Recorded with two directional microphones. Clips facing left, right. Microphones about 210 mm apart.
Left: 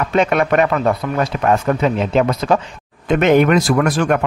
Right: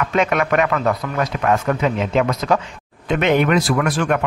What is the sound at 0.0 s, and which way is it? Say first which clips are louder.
Speech: left 3 dB; 35° left (ahead or behind).